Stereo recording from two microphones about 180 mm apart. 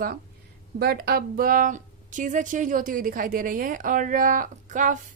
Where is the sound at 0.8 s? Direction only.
60° right (ahead or behind).